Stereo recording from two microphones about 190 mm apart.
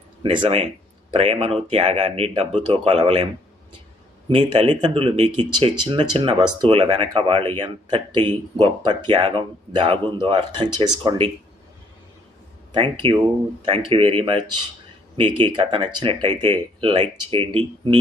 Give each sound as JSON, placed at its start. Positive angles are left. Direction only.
{"t": 0.2, "sound": "speech", "side_deg": -25}
{"t": 4.3, "sound": "speech", "side_deg": -30}
{"t": 12.7, "sound": "speech", "side_deg": -25}
{"t": 16.3, "sound": "speech", "side_deg": 10}
{"t": 16.8, "sound": "speech", "side_deg": -25}